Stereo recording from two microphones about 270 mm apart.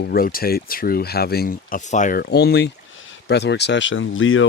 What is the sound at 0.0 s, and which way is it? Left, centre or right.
Speech, left.